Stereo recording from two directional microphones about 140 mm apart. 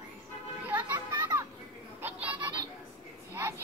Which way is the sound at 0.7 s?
10° right (ahead or behind).